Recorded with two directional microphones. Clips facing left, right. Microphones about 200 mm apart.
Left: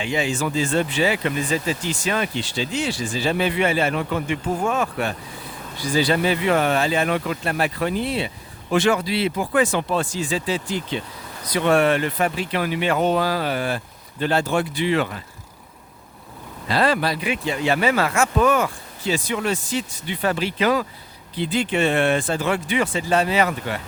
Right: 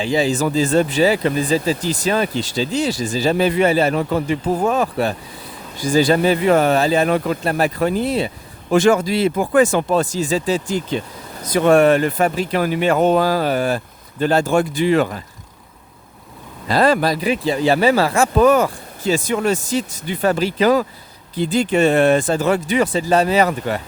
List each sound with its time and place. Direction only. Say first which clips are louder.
0.0 s speech: right 6 dB; 35° right (ahead or behind)
5.7 s speech: right 5 dB; 45° right (ahead or behind)
16.6 s speech: right 5 dB; 45° right (ahead or behind)